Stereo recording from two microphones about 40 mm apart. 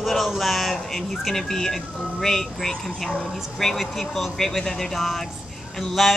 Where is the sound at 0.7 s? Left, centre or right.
Centre.